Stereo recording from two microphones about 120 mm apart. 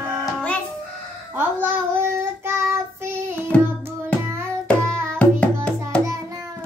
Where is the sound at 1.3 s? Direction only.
20° right (ahead or behind).